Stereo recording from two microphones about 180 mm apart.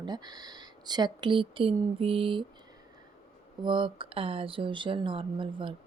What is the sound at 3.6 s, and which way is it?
Speech, 25° right (ahead or behind).